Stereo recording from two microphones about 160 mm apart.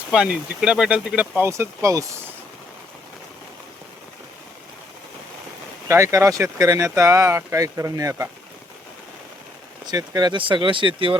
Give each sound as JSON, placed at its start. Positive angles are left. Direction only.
{"t": 0.1, "sound": "speech", "side_deg": -5}
{"t": 5.9, "sound": "speech", "side_deg": -20}
{"t": 9.8, "sound": "speech", "side_deg": -25}